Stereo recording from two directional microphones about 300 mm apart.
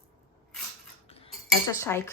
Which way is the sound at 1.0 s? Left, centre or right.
Centre.